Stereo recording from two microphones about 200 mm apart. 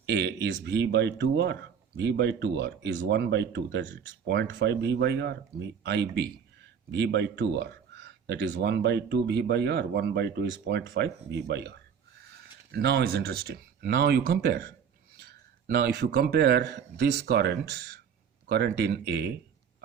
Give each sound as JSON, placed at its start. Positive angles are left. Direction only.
{"t": 0.0, "sound": "a man's voice", "side_deg": -55}